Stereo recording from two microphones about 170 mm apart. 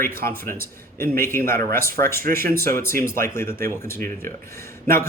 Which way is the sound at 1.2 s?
15° left (ahead or behind).